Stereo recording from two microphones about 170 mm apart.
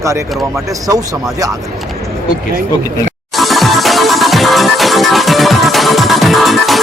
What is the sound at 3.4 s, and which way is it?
Music, centre (ahead or behind).